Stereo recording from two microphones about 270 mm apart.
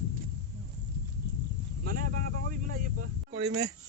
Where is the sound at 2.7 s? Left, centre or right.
Right.